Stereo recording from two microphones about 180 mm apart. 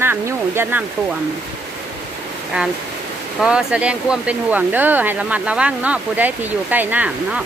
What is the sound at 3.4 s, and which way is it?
Speech, 5° right (ahead or behind).